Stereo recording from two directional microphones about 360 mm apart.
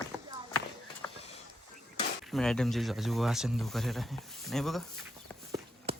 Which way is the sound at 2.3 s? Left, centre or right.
Centre.